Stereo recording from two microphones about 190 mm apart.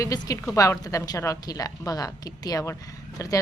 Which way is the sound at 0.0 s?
20° left (ahead or behind).